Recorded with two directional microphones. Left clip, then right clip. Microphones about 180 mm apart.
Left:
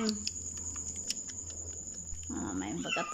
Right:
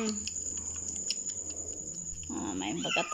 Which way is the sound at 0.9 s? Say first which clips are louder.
Right 6 dB; 35° left (ahead or behind).